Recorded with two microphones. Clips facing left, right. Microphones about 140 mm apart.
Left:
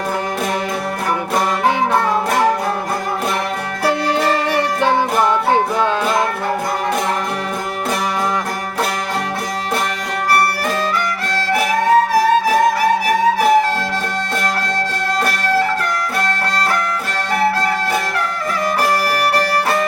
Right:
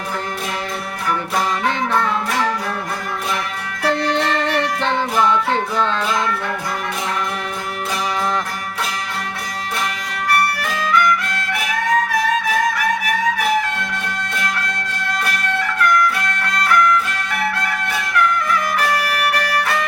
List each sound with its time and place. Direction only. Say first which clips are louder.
2.0 s music: left 4 dB; 50° left (ahead or behind)
3.8 s music: left 2 dB; 5° left (ahead or behind)
5.1 s music: left 3 dB; 50° left (ahead or behind)
10.7 s music: right 1 dB; 35° left (ahead or behind)
15.2 s music: left 7 dB; 35° left (ahead or behind)